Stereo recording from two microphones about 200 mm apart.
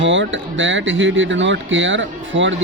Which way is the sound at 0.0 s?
70° right (ahead or behind).